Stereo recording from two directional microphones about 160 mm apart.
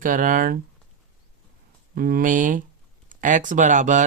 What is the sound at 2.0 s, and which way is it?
Speech, 65° right (ahead or behind).